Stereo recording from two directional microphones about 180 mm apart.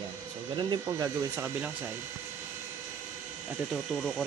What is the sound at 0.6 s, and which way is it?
Speech, 20° right (ahead or behind).